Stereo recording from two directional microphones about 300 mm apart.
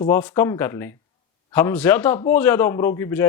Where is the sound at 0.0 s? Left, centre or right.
Centre.